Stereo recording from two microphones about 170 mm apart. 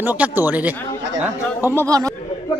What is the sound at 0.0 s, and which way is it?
Speech, 10° right (ahead or behind).